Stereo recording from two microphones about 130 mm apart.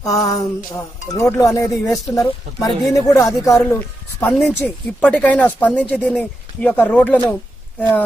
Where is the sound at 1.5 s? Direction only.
25° left (ahead or behind).